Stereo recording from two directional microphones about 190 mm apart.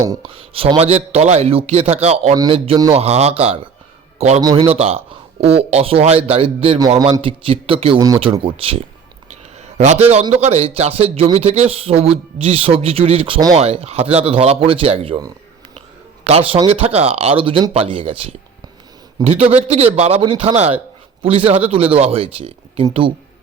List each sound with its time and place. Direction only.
0.2 s a man's voice: 30° right (ahead or behind)
9.6 s a sound: 35° right (ahead or behind)
10.2 s speech: 35° right (ahead or behind)